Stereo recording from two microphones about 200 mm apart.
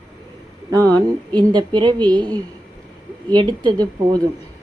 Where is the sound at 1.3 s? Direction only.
20° right (ahead or behind).